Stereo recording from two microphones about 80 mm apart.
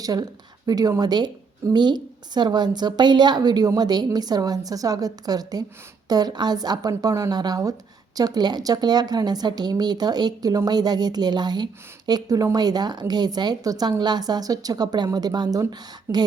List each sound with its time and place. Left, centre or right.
0.0 s a woman's voice: right